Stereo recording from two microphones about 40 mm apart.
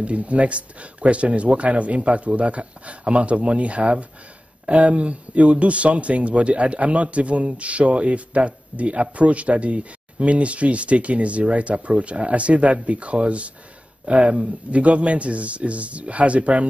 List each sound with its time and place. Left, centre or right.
0.0 s a man's voice: right